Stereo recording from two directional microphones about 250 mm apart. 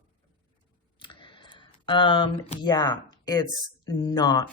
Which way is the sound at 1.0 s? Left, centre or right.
Centre.